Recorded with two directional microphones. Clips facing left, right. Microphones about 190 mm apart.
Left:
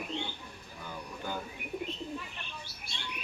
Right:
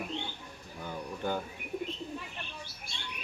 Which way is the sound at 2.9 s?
50° right (ahead or behind).